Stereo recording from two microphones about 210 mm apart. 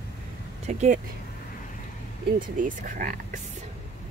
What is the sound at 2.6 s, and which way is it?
Speech, 40° right (ahead or behind).